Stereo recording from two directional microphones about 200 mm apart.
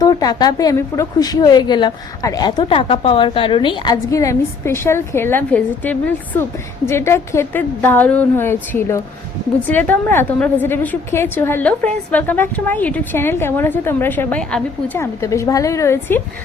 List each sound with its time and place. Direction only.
0.0 s a woman's voice: 20° left (ahead or behind)